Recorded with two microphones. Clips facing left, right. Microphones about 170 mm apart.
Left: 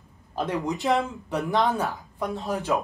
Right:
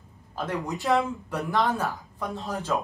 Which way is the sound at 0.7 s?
20° left (ahead or behind).